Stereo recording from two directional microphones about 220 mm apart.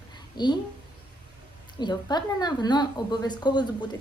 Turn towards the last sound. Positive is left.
turn(degrees=20)  # may be behind; listen again after turning